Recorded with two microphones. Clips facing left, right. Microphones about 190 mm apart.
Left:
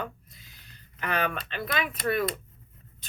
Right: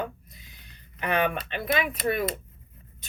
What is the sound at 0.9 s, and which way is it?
A woman's voice, 20° right (ahead or behind).